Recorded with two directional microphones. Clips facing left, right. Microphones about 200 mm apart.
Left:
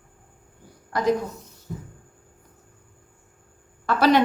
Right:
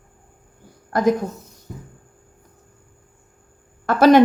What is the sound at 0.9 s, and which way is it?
Speech, 50° right (ahead or behind).